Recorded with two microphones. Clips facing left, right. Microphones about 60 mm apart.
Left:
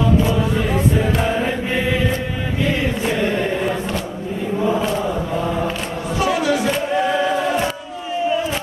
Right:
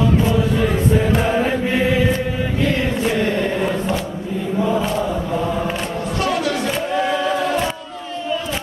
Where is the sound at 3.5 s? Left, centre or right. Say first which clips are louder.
Right 1 dB; centre.